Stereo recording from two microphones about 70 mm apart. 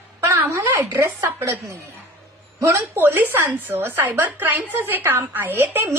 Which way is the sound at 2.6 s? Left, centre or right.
Right.